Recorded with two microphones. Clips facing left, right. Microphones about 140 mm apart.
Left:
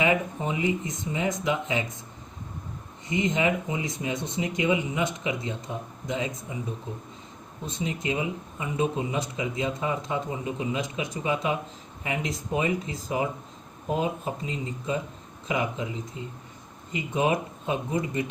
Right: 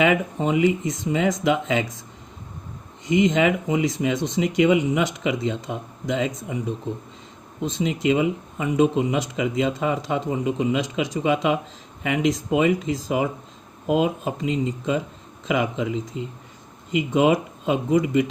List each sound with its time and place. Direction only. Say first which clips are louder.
0.0 s speech: right 5 dB; 75° right (ahead or behind)
3.1 s speech: right 6 dB; 85° right
7.6 s speech: right 8 dB; 90° right
16.9 s speech: right 7 dB; 90° right